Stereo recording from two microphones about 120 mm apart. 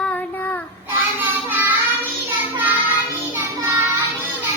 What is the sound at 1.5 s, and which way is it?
Child singing, 15° right (ahead or behind).